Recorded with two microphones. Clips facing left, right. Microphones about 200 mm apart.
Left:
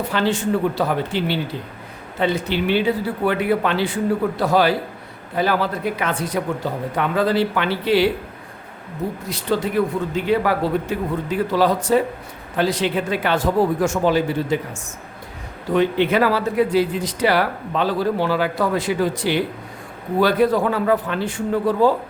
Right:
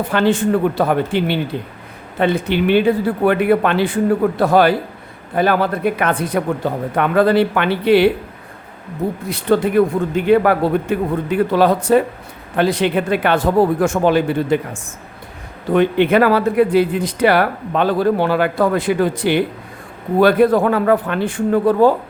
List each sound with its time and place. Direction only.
0.1 s speech: 55° right (ahead or behind)
9.3 s speech: 55° right (ahead or behind)